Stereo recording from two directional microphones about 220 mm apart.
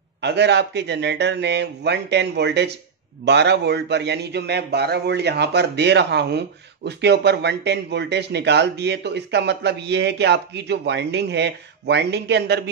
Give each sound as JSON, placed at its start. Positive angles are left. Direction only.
{"t": 0.2, "sound": "a man's voice", "side_deg": -50}